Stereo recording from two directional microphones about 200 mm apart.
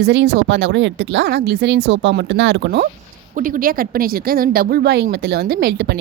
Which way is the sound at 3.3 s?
40° right (ahead or behind).